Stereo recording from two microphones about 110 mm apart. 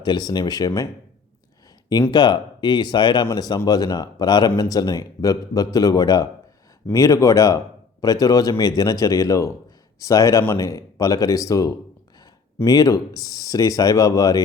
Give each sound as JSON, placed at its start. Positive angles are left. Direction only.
{"t": 0.0, "sound": "speech", "side_deg": 40}
{"t": 1.9, "sound": "speech", "side_deg": 40}